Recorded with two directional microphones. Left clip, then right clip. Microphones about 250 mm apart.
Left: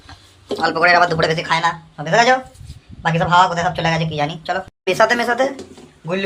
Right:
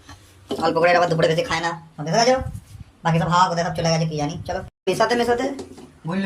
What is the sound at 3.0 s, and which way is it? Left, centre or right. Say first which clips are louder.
A man's voice: left 5 dB; centre.